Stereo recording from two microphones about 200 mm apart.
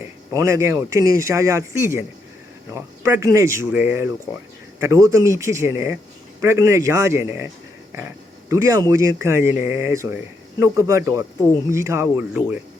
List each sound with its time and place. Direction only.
0.0 s speech: 15° right (ahead or behind)